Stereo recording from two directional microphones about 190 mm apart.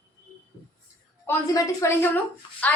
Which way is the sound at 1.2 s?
15° left (ahead or behind).